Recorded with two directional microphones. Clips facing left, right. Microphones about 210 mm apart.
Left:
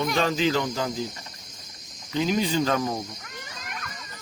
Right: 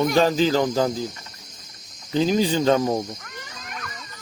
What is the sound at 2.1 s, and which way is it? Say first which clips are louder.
Speech: right 4 dB; 35° right (ahead or behind).